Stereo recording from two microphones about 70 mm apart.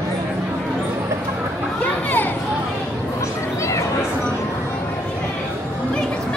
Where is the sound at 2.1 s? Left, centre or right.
Left.